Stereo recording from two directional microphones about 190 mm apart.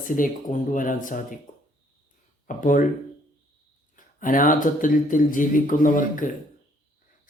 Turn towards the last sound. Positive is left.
turn(degrees=45)  # may be behind; listen again after turning